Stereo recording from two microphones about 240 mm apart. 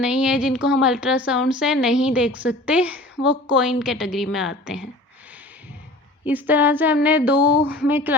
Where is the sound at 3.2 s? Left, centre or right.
Left.